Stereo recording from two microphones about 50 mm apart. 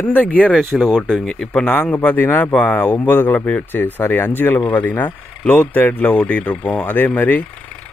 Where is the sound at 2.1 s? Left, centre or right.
Left.